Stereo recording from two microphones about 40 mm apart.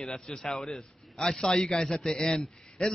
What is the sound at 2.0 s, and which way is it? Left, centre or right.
Speech, centre.